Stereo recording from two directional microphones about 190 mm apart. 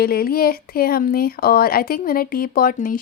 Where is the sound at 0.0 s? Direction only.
55° left (ahead or behind).